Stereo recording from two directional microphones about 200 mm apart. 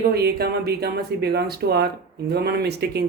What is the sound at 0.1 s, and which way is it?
Speech, 55° right (ahead or behind).